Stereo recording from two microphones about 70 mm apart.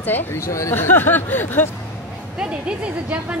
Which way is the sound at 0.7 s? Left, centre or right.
Left.